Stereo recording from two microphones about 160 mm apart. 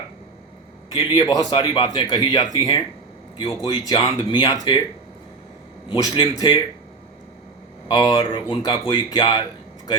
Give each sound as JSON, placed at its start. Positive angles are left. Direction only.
{"t": 0.9, "sound": "speech", "side_deg": 25}
{"t": 5.9, "sound": "speech", "side_deg": 25}
{"t": 7.9, "sound": "speech", "side_deg": 25}